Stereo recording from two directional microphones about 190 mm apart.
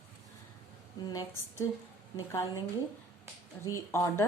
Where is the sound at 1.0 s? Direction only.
20° left (ahead or behind).